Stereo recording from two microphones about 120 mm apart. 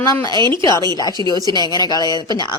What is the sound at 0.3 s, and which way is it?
Speech, 40° right (ahead or behind).